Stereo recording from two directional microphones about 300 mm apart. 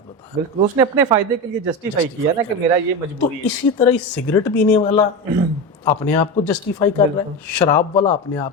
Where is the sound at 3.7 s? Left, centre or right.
Centre.